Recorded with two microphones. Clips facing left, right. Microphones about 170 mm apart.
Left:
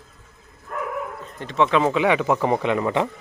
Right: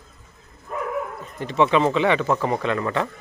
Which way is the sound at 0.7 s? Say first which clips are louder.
Right 1 dB; 10° right (ahead or behind).